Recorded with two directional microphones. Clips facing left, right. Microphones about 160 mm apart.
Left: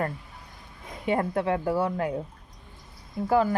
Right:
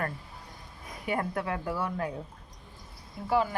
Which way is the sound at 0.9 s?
25° left (ahead or behind).